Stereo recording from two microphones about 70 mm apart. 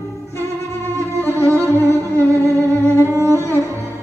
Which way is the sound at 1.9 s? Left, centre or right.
Left.